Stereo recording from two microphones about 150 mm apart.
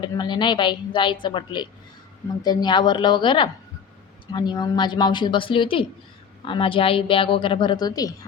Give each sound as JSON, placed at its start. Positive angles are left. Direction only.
{"t": 0.0, "sound": "a woman's voice", "side_deg": 30}